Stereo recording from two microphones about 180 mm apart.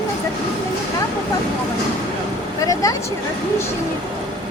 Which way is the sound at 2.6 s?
20° left (ahead or behind).